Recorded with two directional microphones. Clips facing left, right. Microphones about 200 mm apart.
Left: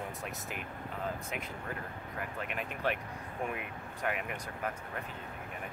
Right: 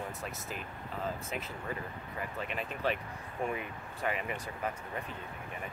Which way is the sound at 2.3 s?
5° left (ahead or behind).